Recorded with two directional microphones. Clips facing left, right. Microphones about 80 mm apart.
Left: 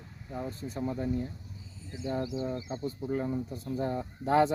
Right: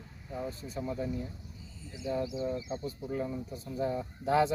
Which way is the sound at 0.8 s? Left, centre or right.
Left.